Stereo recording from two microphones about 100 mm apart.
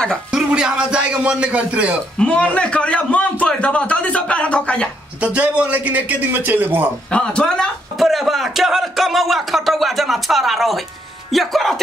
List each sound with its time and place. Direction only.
0.3 s a man's voice: 5° right (ahead or behind)
2.1 s a man's voice: 10° left (ahead or behind)
5.2 s a man's voice: 15° right (ahead or behind)
7.1 s a man's voice: 10° left (ahead or behind)